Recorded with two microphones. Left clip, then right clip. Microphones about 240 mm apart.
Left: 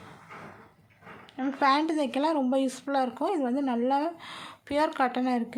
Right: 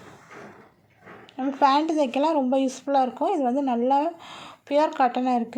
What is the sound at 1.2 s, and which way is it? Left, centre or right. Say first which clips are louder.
A woman's voice: right 5 dB; centre.